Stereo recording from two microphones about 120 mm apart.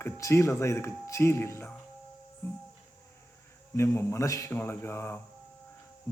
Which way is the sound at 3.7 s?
25° left (ahead or behind).